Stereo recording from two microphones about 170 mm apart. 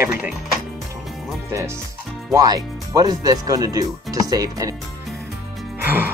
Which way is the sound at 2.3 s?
20° right (ahead or behind).